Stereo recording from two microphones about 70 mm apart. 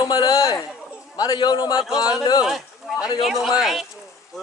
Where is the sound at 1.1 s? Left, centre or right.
Left.